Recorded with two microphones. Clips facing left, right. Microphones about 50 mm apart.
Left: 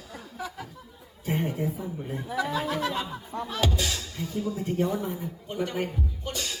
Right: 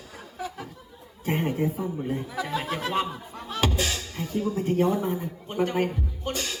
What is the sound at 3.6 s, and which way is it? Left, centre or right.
Speech, right.